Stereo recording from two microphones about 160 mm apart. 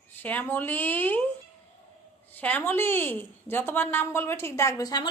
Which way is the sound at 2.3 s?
10° left (ahead or behind).